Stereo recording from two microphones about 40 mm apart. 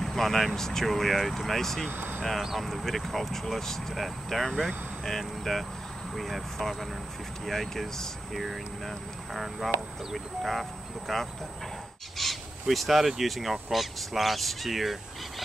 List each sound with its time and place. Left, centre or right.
0.0 s speech: centre
1.9 s speech: right
2.5 s speech: centre
12.2 s owl: centre
12.6 s speech: centre